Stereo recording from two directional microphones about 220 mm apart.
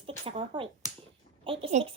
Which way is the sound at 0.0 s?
25° right (ahead or behind).